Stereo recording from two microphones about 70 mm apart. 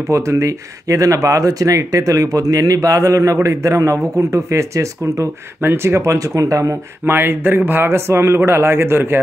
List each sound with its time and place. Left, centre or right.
0.1 s speech: right
5.6 s speech: right
7.1 s speech: right